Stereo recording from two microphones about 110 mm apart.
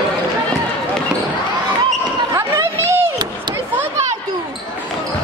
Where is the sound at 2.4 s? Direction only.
25° right (ahead or behind).